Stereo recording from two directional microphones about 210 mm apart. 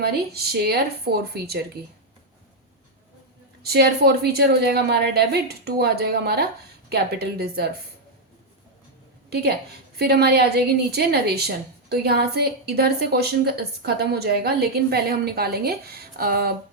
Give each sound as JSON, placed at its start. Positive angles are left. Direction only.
{"t": 0.0, "sound": "a woman's voice", "side_deg": -50}
{"t": 3.6, "sound": "a woman's voice", "side_deg": -50}
{"t": 9.3, "sound": "a woman's voice", "side_deg": -50}